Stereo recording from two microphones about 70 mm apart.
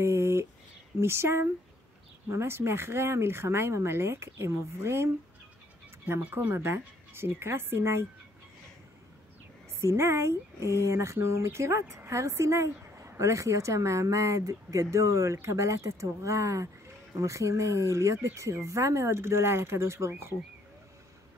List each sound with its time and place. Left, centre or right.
0.0 s a sound: right
1.0 s speech: right
9.8 s speech: right